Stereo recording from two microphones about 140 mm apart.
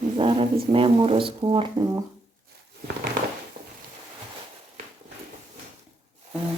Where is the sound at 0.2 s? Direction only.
35° right (ahead or behind).